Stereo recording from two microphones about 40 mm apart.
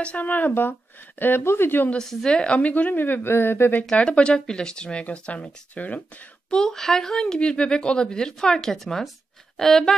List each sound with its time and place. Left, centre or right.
0.2 s a woman's voice: left
1.2 s speech: left
2.0 s a woman's voice: centre; by 3.7 s left
3.9 s speech: left
6.5 s a woman's voice: centre